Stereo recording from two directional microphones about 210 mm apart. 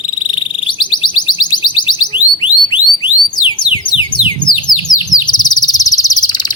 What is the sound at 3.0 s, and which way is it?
Alarm, 20° left (ahead or behind).